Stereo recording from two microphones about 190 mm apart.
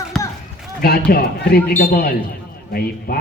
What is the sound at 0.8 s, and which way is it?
Speech, 55° left (ahead or behind).